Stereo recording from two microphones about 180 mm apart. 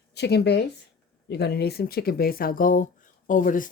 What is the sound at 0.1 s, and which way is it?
Speech, 65° left (ahead or behind).